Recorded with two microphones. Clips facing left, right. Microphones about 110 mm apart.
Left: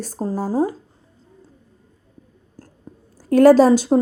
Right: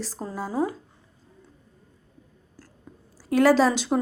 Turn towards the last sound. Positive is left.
turn(degrees=40)  # may be behind; listen again after turning